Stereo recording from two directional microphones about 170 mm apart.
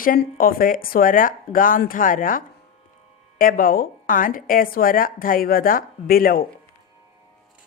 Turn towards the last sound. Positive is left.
turn(degrees=60)  # may be behind; listen again after turning